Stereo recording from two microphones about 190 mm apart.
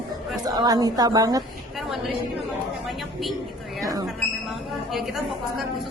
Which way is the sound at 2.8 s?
Centre (ahead or behind).